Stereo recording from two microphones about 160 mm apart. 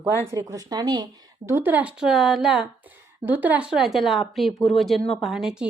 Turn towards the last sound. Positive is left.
turn(degrees=-5)  # may be behind; listen again after turning